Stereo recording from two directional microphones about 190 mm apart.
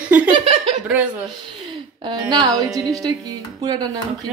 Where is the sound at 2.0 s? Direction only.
25° right (ahead or behind).